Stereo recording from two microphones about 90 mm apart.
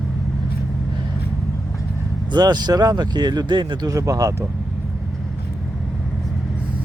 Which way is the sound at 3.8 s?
35° right (ahead or behind).